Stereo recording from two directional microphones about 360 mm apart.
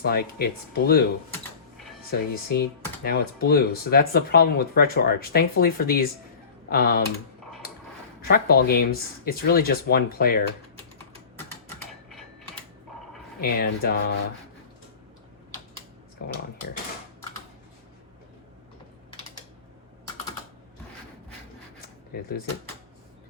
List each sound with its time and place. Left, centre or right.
0.0 s speech: left
2.0 s speech: left
8.2 s speech: left
11.8 s typewriter: centre
13.4 s speech: left
16.2 s speech: left